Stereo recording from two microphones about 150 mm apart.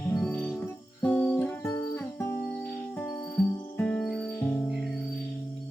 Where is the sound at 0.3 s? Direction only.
10° left (ahead or behind).